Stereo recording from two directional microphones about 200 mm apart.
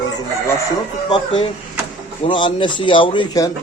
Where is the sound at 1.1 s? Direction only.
25° left (ahead or behind).